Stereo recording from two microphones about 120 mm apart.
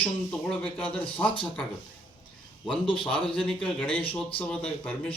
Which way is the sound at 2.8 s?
45° left (ahead or behind).